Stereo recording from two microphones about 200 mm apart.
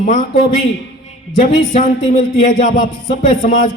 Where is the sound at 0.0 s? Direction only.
40° left (ahead or behind).